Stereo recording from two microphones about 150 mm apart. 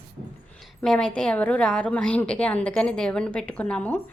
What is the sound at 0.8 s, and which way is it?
A woman's voice, 5° left (ahead or behind).